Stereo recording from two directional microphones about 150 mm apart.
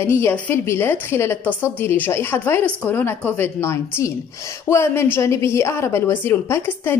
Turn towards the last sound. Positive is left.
turn(degrees=15)  # may be behind; listen again after turning